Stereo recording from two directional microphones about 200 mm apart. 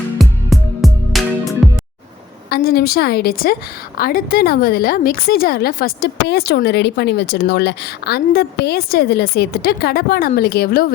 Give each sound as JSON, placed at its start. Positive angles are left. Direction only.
{"t": 0.2, "sound": "music", "side_deg": 0}
{"t": 2.5, "sound": "a woman's voice", "side_deg": 50}